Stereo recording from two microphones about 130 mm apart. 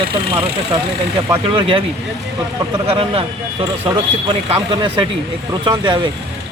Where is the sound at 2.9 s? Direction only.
45° right (ahead or behind).